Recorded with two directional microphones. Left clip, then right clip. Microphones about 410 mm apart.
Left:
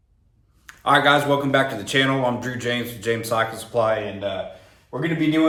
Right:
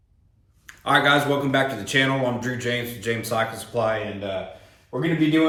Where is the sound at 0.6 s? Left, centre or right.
Centre.